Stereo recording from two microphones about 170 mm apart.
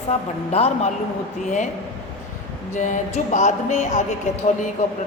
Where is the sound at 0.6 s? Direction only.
35° left (ahead or behind).